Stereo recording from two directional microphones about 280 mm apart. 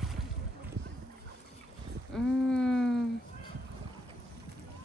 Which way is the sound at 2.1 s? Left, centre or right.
Centre.